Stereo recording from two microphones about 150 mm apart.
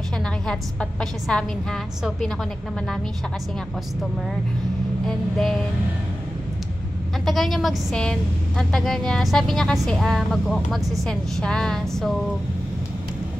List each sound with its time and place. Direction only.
0.5 s a woman's voice: 5° left (ahead or behind)
5.0 s a woman's voice: 5° left (ahead or behind)
7.2 s a woman's voice: centre (ahead or behind)